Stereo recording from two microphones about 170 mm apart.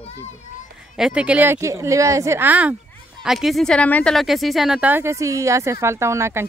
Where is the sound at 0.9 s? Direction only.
5° right (ahead or behind).